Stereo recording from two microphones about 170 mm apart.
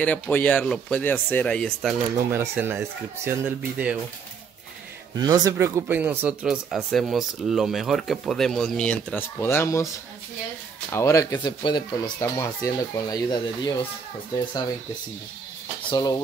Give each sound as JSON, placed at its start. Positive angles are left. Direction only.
{"t": 0.0, "sound": "speech", "side_deg": 10}
{"t": 2.3, "sound": "speech", "side_deg": -15}
{"t": 5.1, "sound": "speech", "side_deg": -20}
{"t": 10.9, "sound": "speech", "side_deg": 15}
{"t": 15.9, "sound": "speech", "side_deg": 20}